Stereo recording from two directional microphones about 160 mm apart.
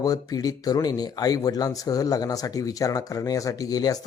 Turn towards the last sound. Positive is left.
turn(degrees=25)  # may be behind; listen again after turning